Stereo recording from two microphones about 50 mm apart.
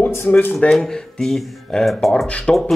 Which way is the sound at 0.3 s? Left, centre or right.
Left.